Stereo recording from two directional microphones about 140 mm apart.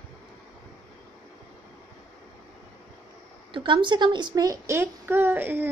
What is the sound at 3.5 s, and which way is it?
A woman's voice, 35° right (ahead or behind).